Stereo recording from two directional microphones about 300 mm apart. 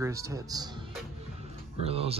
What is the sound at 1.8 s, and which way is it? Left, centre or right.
Speech, centre.